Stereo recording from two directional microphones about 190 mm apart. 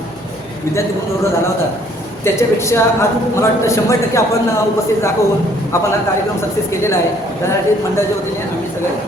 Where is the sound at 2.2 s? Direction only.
15° left (ahead or behind).